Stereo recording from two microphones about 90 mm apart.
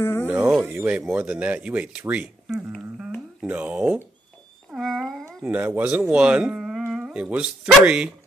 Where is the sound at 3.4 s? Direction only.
15° right (ahead or behind).